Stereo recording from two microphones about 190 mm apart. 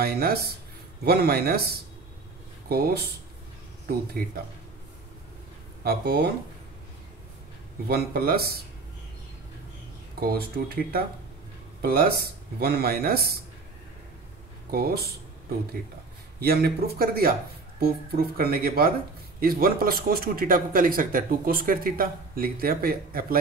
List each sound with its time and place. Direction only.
0.0 s speech: 55° right (ahead or behind)
5.9 s speech: 55° right (ahead or behind)
7.9 s speech: 55° right (ahead or behind)
10.2 s speech: 55° right (ahead or behind)
14.7 s speech: 55° right (ahead or behind)
16.3 s speech: 55° right (ahead or behind)